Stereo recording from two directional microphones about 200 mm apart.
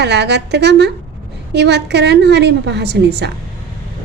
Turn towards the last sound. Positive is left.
turn(degrees=-55)  # may be behind; listen again after turning